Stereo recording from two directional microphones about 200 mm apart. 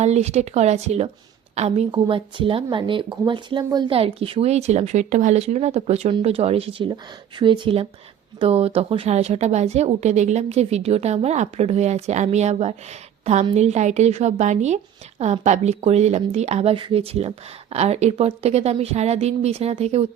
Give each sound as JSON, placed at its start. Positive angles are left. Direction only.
{"t": 0.0, "sound": "speech", "side_deg": -35}